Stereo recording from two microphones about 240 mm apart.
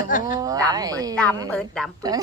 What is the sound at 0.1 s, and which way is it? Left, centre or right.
Speech, left.